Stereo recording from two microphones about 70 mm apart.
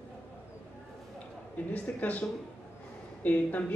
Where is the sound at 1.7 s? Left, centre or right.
Left.